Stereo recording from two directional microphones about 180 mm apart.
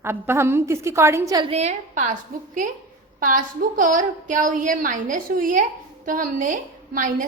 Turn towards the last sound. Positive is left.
turn(degrees=-45)  # may be behind; listen again after turning